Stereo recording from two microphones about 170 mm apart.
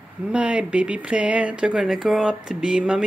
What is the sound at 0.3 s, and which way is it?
Speech, 5° right (ahead or behind).